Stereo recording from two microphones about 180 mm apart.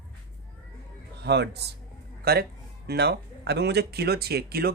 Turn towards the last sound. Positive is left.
turn(degrees=-60)  # may be behind; listen again after turning